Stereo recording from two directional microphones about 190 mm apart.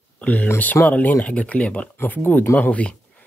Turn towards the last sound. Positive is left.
turn(degrees=5)  # may be behind; listen again after turning